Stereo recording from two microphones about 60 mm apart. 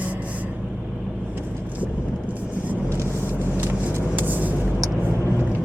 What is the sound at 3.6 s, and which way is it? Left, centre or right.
Vehicle, right.